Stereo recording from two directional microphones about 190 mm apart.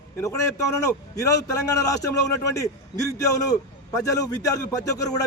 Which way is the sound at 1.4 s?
15° left (ahead or behind).